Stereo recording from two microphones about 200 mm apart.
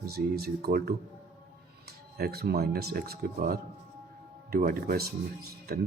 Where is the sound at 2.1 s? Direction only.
50° right (ahead or behind).